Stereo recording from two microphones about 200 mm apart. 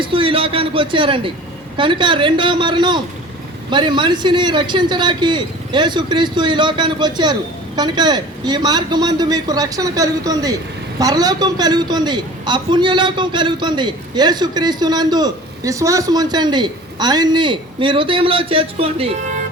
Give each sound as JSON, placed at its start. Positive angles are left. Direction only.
{"t": 0.0, "sound": "a man's voice", "side_deg": -25}